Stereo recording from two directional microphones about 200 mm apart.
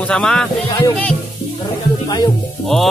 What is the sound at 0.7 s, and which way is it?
Speech, 10° left (ahead or behind).